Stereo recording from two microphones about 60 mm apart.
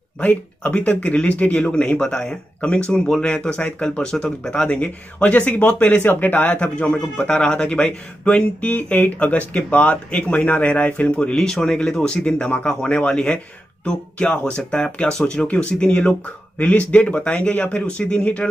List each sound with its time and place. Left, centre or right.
0.2 s speech: left